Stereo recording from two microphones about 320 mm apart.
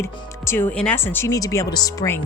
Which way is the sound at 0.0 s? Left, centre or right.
Centre.